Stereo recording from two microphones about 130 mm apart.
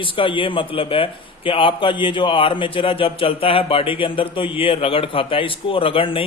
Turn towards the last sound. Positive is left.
turn(degrees=45)  # may be behind; listen again after turning